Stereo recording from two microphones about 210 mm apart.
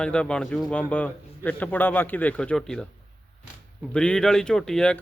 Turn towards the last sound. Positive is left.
turn(degrees=5)  # may be behind; listen again after turning